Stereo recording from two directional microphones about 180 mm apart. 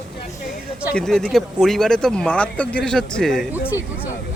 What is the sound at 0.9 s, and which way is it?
Speech, 5° left (ahead or behind).